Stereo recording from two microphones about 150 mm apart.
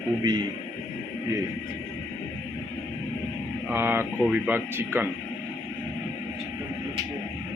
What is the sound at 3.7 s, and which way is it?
Speech, 15° right (ahead or behind).